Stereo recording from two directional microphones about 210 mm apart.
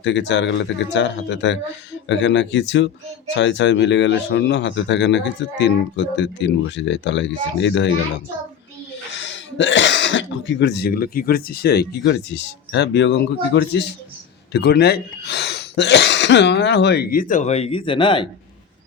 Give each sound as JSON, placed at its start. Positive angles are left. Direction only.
{"t": 0.0, "sound": "speech", "side_deg": 60}
{"t": 9.1, "sound": "speech", "side_deg": 60}